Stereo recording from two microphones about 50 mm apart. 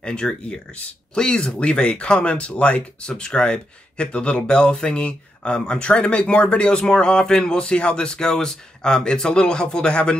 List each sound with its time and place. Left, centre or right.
0.0 s speech: centre